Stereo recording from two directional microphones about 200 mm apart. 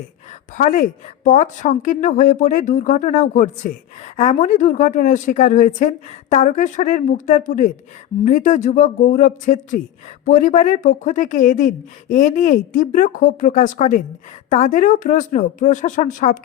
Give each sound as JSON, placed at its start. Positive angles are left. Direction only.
{"t": 0.5, "sound": "a woman's voice", "side_deg": 40}